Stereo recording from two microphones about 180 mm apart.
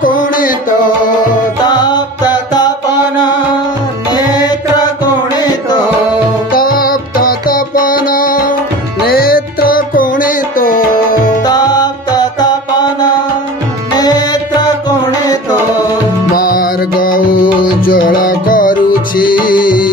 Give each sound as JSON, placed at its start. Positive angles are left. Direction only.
{"t": 0.0, "sound": "a sound", "side_deg": 50}
{"t": 1.6, "sound": "music", "side_deg": 25}
{"t": 4.1, "sound": "music", "side_deg": 20}
{"t": 6.5, "sound": "music", "side_deg": 55}
{"t": 11.4, "sound": "music", "side_deg": 20}
{"t": 13.9, "sound": "music", "side_deg": 20}
{"t": 16.3, "sound": "music", "side_deg": 50}